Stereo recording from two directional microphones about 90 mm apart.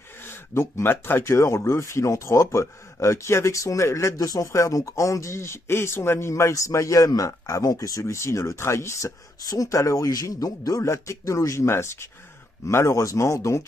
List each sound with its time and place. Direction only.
0.2 s speech: 25° left (ahead or behind)